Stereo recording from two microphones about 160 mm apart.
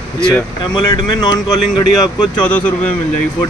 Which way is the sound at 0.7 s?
25° left (ahead or behind).